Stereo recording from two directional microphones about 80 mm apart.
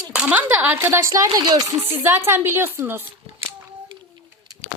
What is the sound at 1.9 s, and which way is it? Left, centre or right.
Speech, right.